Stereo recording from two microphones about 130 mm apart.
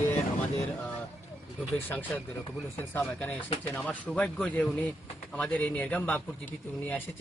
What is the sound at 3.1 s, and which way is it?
Speech, 15° left (ahead or behind).